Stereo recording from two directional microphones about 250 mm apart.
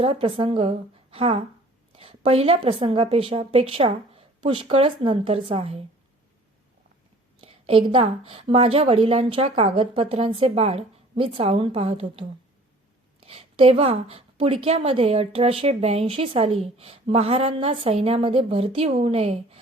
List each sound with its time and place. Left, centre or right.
0.0 s a woman's voice: right
7.4 s a woman's voice: right